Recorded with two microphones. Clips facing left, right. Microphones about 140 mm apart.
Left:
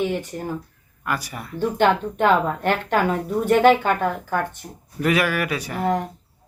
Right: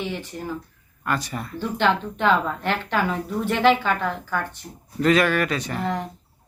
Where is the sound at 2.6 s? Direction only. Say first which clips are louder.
Left 4 dB; 50° left (ahead or behind).